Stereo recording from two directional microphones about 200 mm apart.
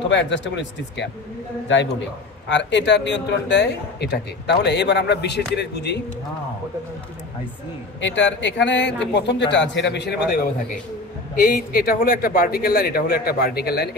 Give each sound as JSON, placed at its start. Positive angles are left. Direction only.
{"t": 0.1, "sound": "a man's voice", "side_deg": 65}
{"t": 2.5, "sound": "a man's voice", "side_deg": 60}
{"t": 8.0, "sound": "a man's voice", "side_deg": 65}
{"t": 11.3, "sound": "speech", "side_deg": 45}